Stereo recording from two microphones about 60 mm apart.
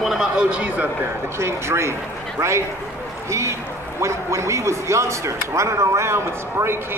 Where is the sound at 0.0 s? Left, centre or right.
Centre.